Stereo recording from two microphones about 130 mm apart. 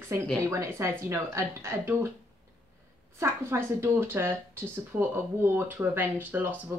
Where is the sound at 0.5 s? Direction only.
25° right (ahead or behind).